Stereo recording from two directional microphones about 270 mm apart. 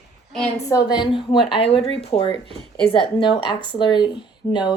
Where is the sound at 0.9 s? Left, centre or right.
Centre.